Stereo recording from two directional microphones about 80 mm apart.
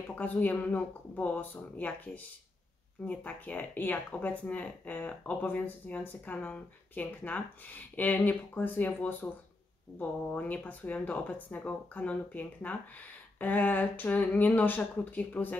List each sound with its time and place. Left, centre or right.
0.1 s speech: centre